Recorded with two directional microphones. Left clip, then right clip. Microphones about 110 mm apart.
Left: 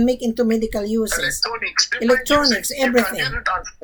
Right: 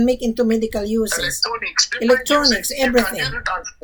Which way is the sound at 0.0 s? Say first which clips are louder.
Right 1 dB; centre (ahead or behind).